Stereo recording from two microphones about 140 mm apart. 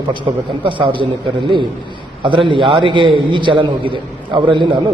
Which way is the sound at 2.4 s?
35° right (ahead or behind).